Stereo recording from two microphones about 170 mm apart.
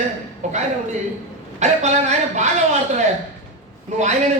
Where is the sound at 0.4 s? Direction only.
45° right (ahead or behind).